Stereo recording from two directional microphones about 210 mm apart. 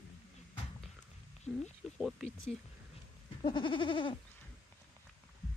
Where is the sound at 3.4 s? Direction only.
25° left (ahead or behind).